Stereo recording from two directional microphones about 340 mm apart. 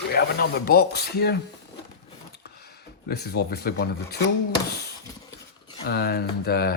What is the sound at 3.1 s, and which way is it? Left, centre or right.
Speech, left.